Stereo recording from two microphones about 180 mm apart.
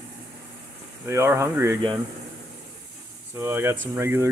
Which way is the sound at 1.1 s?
15° right (ahead or behind).